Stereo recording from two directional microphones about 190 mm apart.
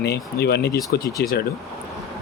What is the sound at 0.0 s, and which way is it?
Speech, 60° left (ahead or behind).